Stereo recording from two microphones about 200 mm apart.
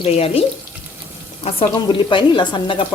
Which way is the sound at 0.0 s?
30° left (ahead or behind).